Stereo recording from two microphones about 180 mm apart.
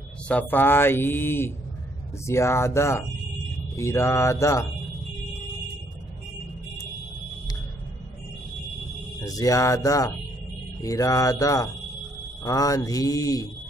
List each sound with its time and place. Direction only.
0.3 s speech: 10° left (ahead or behind)
9.2 s speech: 20° left (ahead or behind)